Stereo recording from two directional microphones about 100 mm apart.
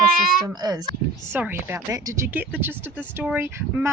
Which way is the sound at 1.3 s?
20° right (ahead or behind).